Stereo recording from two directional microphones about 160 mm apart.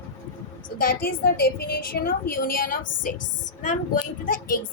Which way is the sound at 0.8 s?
65° left (ahead or behind).